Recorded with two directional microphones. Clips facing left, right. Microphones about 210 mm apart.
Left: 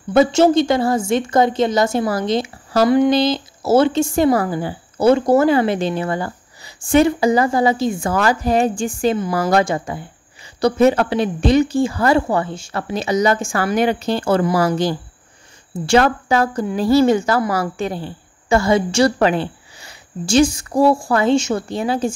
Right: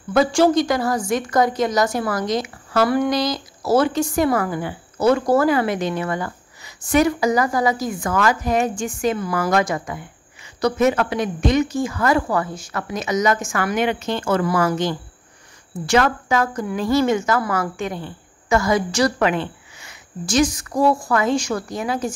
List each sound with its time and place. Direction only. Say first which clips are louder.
0.1 s a woman's voice: left 3 dB; 25° left (ahead or behind)